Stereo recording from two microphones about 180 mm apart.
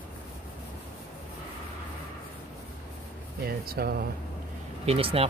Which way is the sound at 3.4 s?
60° right (ahead or behind).